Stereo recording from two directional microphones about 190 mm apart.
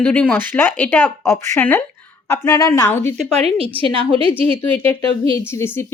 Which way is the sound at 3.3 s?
30° right (ahead or behind).